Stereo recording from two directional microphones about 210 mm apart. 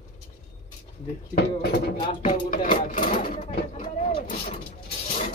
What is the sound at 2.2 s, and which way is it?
Speech, 35° left (ahead or behind).